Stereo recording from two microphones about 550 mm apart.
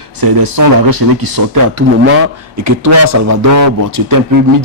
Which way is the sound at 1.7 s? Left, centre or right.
Right.